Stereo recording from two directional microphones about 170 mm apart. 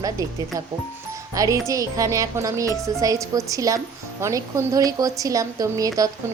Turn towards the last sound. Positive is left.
turn(degrees=-20)  # may be behind; listen again after turning